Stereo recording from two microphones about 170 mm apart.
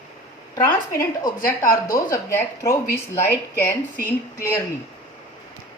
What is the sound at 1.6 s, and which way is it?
Speech, 55° left (ahead or behind).